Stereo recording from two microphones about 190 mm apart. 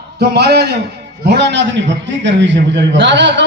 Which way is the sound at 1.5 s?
70° right (ahead or behind).